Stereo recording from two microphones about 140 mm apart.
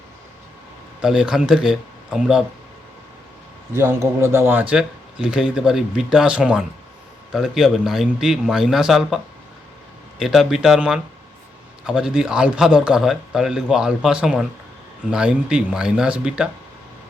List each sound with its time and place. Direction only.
1.0 s a man's voice: 5° right (ahead or behind)
3.7 s a man's voice: 20° right (ahead or behind)